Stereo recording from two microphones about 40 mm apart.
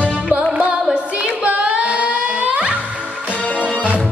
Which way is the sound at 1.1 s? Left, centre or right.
Right.